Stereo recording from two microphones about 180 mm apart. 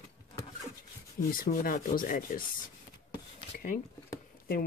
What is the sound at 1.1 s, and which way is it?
Rub, 50° left (ahead or behind).